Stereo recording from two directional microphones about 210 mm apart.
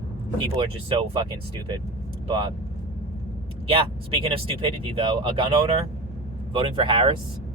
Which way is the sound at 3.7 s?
25° right (ahead or behind).